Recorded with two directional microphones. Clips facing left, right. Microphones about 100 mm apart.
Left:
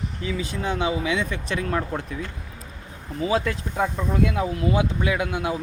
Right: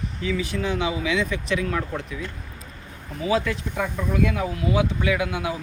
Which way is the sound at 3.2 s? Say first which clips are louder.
Right 1 dB; 30° left (ahead or behind).